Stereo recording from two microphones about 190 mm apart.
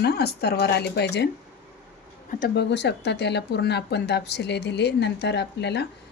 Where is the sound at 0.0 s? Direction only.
55° left (ahead or behind).